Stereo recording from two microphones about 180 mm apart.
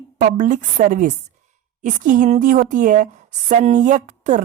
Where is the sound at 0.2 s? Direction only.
50° right (ahead or behind).